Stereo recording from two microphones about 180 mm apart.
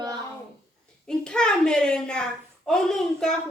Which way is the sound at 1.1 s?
5° left (ahead or behind).